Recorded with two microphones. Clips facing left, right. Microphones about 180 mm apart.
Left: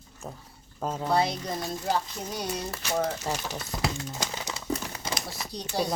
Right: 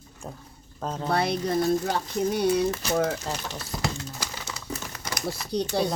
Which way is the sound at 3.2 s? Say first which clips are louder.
Left 1 dB; 15° left (ahead or behind).